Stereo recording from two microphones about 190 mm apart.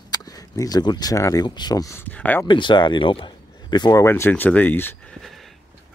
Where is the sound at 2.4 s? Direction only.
25° left (ahead or behind).